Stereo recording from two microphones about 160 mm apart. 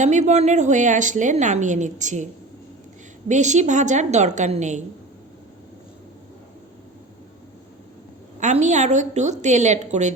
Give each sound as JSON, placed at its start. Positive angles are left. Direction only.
{"t": 0.0, "sound": "a woman's voice", "side_deg": -45}
{"t": 3.2, "sound": "a woman's voice", "side_deg": -50}
{"t": 8.4, "sound": "a woman's voice", "side_deg": -50}